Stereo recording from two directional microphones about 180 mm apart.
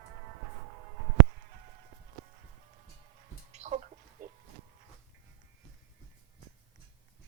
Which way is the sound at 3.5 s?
40° right (ahead or behind).